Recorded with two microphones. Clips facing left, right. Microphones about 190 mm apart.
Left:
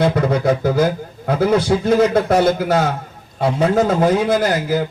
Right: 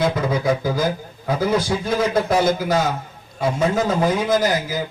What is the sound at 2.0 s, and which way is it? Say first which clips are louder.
Speech: left 4 dB; 65° left (ahead or behind).